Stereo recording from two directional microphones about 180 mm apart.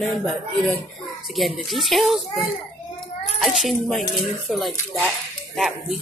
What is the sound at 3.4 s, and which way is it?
Speech, centre (ahead or behind).